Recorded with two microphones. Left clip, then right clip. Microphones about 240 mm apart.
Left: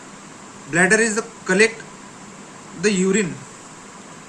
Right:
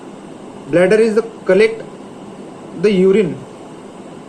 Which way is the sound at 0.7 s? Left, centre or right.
Left.